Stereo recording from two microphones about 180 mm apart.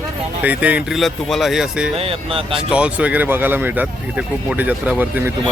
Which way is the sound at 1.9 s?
30° right (ahead or behind).